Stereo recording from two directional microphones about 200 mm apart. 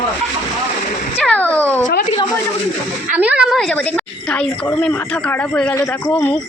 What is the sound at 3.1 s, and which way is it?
A woman's voice, 5° right (ahead or behind).